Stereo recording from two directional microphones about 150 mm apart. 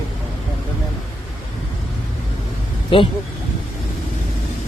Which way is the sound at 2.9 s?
35° left (ahead or behind).